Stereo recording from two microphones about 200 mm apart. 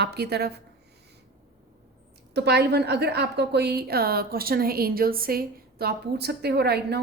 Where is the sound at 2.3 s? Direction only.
55° right (ahead or behind).